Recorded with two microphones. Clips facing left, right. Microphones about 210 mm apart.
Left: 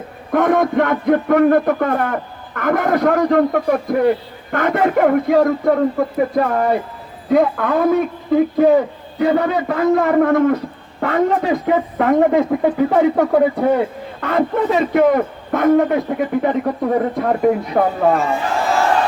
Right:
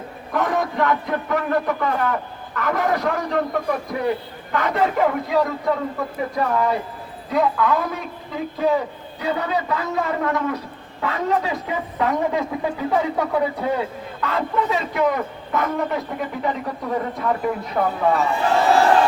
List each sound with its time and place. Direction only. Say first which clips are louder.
0.3 s a man's voice: left 8 dB; 55° left (ahead or behind)